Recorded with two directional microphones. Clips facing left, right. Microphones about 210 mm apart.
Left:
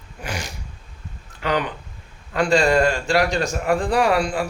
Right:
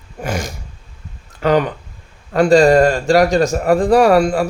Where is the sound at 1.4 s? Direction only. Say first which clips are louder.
Right 8 dB; 45° right (ahead or behind).